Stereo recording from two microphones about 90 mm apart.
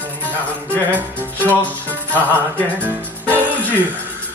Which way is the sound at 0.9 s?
20° right (ahead or behind).